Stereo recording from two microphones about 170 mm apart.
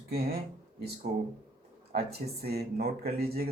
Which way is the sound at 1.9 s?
65° right (ahead or behind).